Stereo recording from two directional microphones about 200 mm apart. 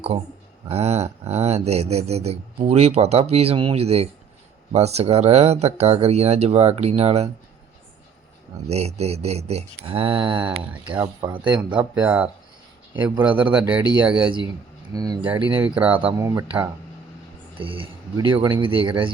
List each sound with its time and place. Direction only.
0.7 s speech: 30° right (ahead or behind)
8.6 s speech: 30° right (ahead or behind)
10.7 s speech: 5° right (ahead or behind)
11.0 s speech: 25° right (ahead or behind)
11.7 s speech: 5° right (ahead or behind)
14.9 s speech: 20° right (ahead or behind)
15.5 s speech: 5° right (ahead or behind)
17.6 s speech: 25° right (ahead or behind)